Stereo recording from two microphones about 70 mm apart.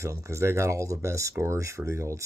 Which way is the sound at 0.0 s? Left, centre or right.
Right.